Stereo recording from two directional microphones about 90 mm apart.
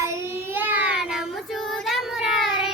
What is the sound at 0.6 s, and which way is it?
Child singing, 15° right (ahead or behind).